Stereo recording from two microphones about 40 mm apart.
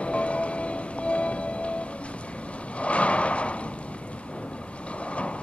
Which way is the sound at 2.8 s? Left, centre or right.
Left.